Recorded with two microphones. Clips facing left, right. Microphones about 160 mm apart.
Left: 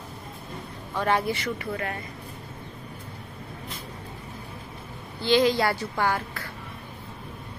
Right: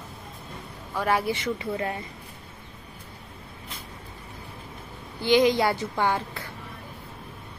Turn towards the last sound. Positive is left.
turn(degrees=-20)  # may be behind; listen again after turning